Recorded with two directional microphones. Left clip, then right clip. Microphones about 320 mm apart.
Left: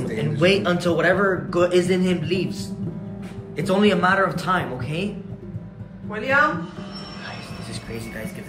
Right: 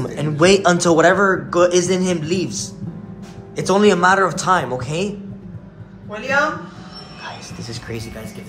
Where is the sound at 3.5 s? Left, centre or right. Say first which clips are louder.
Right 5 dB; centre.